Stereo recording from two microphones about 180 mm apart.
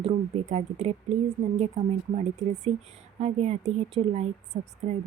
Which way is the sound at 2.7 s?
35° right (ahead or behind).